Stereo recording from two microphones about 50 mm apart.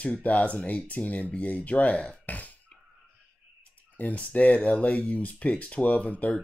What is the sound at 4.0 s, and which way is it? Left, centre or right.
Speech, left.